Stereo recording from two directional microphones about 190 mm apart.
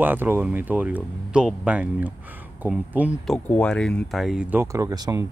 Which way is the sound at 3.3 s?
5° left (ahead or behind).